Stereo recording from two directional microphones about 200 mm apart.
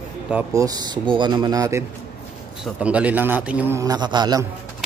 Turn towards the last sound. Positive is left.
turn(degrees=-20)  # may be behind; listen again after turning